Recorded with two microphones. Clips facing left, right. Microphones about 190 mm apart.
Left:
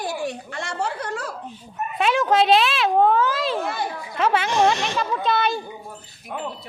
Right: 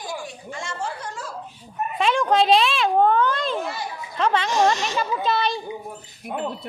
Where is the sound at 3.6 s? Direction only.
55° left (ahead or behind).